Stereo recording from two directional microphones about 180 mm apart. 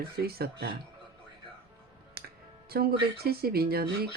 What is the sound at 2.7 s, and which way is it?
Speech, 55° right (ahead or behind).